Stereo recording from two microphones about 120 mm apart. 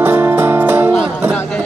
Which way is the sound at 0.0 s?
15° right (ahead or behind).